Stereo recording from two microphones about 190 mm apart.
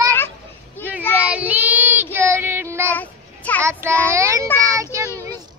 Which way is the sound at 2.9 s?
10° left (ahead or behind).